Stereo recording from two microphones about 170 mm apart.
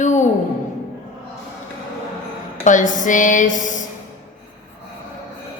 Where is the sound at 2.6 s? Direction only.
50° left (ahead or behind).